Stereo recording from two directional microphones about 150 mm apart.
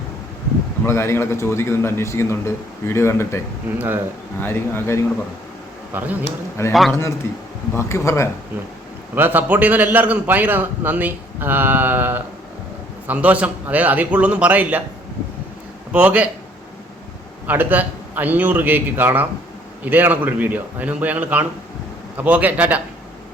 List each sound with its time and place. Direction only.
0.9 s a man's voice: 15° left (ahead or behind)
3.8 s a man's voice: 15° right (ahead or behind)
4.4 s a man's voice: 15° left (ahead or behind)
5.9 s a man's voice: 10° right (ahead or behind)
6.6 s a man's voice: 15° left (ahead or behind)
9.1 s a man's voice: 10° right (ahead or behind)
15.9 s a man's voice: 10° right (ahead or behind)
17.4 s a man's voice: 10° right (ahead or behind)